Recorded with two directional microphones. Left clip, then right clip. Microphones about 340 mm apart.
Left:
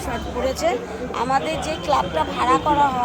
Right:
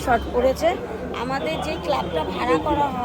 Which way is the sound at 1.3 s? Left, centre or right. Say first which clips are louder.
Left 3 dB; centre.